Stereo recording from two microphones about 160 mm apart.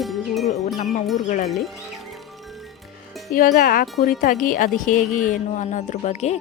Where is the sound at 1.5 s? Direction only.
Centre (ahead or behind).